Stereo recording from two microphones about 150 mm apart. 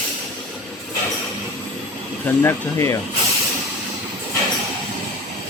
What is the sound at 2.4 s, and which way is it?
Speech, 15° left (ahead or behind).